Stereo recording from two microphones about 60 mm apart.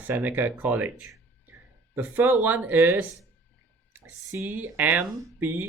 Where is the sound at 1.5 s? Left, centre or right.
Right.